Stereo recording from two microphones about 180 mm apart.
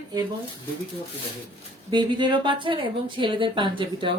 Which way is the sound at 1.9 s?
25° right (ahead or behind).